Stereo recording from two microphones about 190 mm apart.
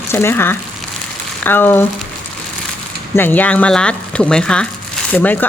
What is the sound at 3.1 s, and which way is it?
Speech, 10° left (ahead or behind).